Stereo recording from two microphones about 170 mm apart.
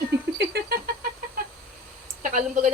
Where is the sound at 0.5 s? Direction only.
65° right (ahead or behind).